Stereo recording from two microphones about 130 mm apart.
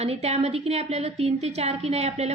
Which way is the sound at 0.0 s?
55° right (ahead or behind).